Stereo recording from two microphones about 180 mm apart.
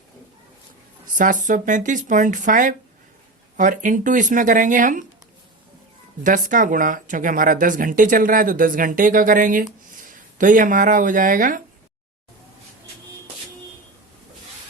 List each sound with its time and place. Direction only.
1.1 s speech: 45° right (ahead or behind)
6.2 s speech: 45° right (ahead or behind)